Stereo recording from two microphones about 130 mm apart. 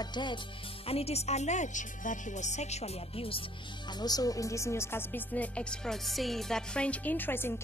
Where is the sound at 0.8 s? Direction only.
50° left (ahead or behind).